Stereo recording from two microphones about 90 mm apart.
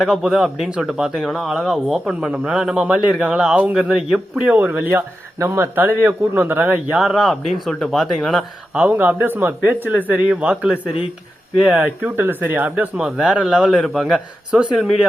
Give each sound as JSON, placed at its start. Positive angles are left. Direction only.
{"t": 0.0, "sound": "speech", "side_deg": -5}
{"t": 4.4, "sound": "speech", "side_deg": -15}
{"t": 6.9, "sound": "speech", "side_deg": -5}
{"t": 8.9, "sound": "speech", "side_deg": -20}